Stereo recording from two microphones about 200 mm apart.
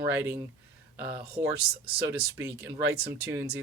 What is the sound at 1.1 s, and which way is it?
Speech, 50° right (ahead or behind).